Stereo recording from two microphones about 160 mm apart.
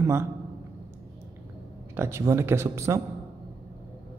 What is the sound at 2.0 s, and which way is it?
A man's voice, 15° right (ahead or behind).